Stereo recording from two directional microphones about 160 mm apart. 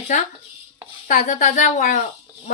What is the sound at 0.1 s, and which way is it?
Speech, 50° left (ahead or behind).